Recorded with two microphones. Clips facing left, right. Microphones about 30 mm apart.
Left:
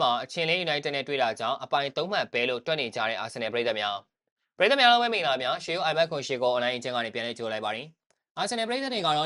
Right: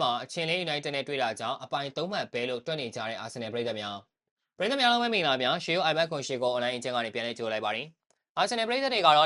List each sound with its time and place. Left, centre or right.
0.0 s speech: centre; by 3.4 s left
3.4 s speech: left
4.8 s speech: centre
5.0 s speech: centre
6.1 s speech: centre